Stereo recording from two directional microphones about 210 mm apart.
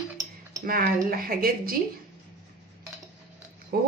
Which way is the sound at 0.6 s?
45° right (ahead or behind).